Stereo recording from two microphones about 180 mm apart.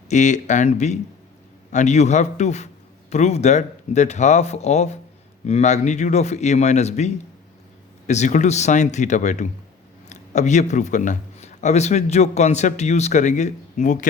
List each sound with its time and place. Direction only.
0.1 s speech: 40° left (ahead or behind)